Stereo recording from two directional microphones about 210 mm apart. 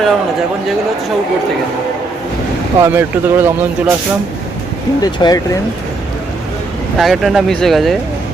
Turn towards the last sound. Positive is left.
turn(degrees=0)  # may be behind; listen again after turning